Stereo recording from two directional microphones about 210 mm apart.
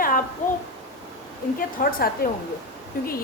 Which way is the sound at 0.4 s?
40° left (ahead or behind).